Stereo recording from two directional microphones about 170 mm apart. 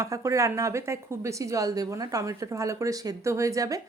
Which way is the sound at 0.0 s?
15° right (ahead or behind).